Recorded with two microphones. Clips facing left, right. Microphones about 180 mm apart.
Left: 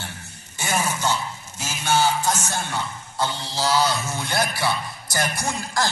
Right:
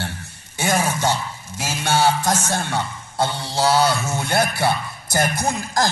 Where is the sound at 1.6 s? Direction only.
65° right (ahead or behind).